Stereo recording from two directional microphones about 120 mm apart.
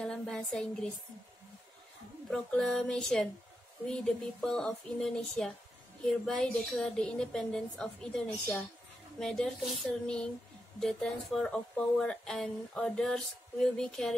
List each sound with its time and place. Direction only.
0.0 s a woman's voice: 5° left (ahead or behind)
2.2 s speech: 5° left (ahead or behind)